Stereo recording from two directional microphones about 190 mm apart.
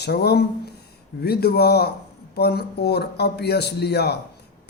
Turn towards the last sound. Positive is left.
turn(degrees=60)  # may be behind; listen again after turning